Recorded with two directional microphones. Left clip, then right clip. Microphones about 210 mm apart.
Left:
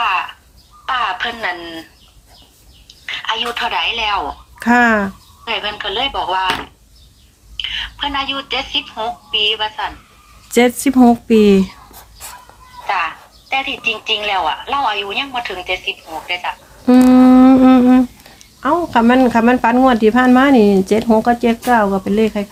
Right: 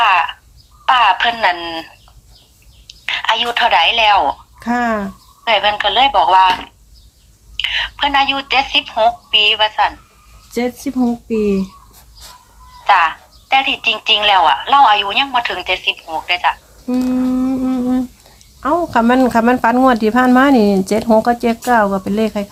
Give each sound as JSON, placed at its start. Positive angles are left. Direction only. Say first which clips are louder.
{"t": 0.0, "sound": "a sound", "louder": "right 5 dB", "side_deg": -35}
{"t": 0.9, "sound": "telephone", "louder": "right 7 dB", "side_deg": -35}
{"t": 2.8, "sound": "speech", "louder": "right 5 dB", "side_deg": -35}
{"t": 4.6, "sound": "speech", "louder": "left 5 dB", "side_deg": 15}
{"t": 5.5, "sound": "a woman's voice", "louder": "right 7 dB", "side_deg": -35}
{"t": 7.5, "sound": "a woman's voice", "louder": "right 4 dB", "side_deg": -35}
{"t": 10.5, "sound": "speech", "louder": "left 7 dB", "side_deg": 25}
{"t": 10.9, "sound": "speech", "louder": "left 8 dB", "side_deg": 40}
{"t": 12.9, "sound": "a woman's voice", "louder": "right 7 dB", "side_deg": -35}
{"t": 16.8, "sound": "humming", "louder": "left 9 dB", "side_deg": 50}
{"t": 18.6, "sound": "speech", "louder": "even", "side_deg": 0}